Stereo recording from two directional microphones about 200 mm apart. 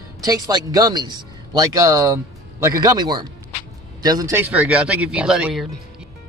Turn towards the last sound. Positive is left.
turn(degrees=0)  # may be behind; listen again after turning